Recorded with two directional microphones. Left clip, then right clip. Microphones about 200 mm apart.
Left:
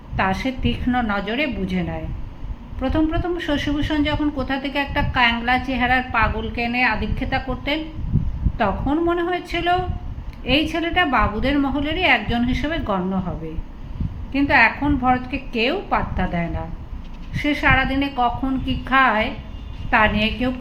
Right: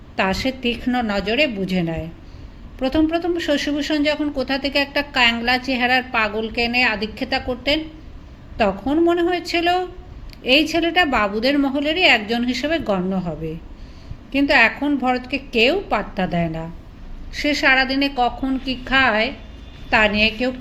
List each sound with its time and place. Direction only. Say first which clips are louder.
0.2 s a man's voice: right 1 dB; 45° right (ahead or behind)
14.3 s a man's voice: right 1 dB; 45° right (ahead or behind)